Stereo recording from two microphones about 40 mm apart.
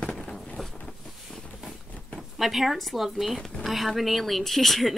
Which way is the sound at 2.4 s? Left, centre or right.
Centre.